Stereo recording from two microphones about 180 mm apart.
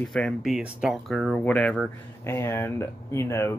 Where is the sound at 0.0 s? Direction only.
5° left (ahead or behind).